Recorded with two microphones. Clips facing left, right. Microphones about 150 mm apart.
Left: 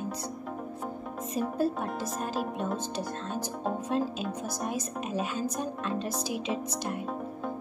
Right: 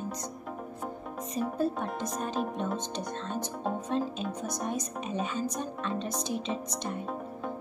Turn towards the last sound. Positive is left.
turn(degrees=5)  # may be behind; listen again after turning